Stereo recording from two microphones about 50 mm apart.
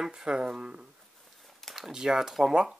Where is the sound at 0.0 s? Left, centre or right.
Centre.